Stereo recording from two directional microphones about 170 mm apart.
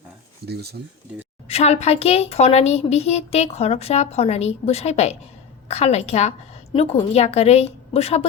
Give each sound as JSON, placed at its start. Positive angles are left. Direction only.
{"t": 0.4, "sound": "stir", "side_deg": -70}
{"t": 1.5, "sound": "a woman's voice", "side_deg": 40}